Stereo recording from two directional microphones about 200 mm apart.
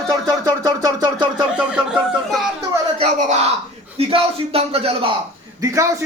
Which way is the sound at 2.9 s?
35° right (ahead or behind).